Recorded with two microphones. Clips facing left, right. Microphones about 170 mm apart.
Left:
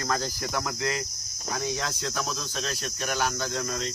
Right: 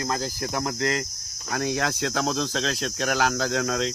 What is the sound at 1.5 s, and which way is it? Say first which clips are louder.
Cricket: right 5 dB; 70° right (ahead or behind).